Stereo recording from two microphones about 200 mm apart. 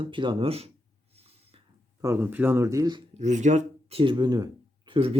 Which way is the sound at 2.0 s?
10° right (ahead or behind).